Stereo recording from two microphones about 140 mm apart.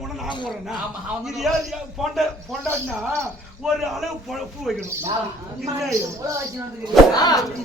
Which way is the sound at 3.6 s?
Centre (ahead or behind).